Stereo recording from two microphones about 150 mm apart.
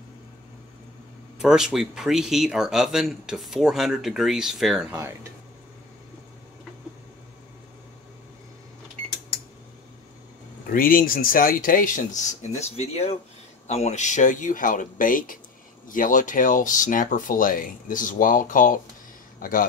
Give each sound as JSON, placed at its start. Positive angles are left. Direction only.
{"t": 1.4, "sound": "speech", "side_deg": -5}
{"t": 4.9, "sound": "speech", "side_deg": -20}
{"t": 10.7, "sound": "speech", "side_deg": 70}
{"t": 12.2, "sound": "speech", "side_deg": 50}